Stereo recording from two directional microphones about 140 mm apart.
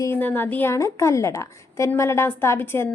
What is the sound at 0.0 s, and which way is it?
A woman's voice, 15° left (ahead or behind).